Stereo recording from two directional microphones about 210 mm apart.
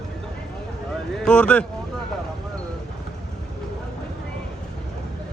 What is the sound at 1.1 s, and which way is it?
Speech, 5° left (ahead or behind).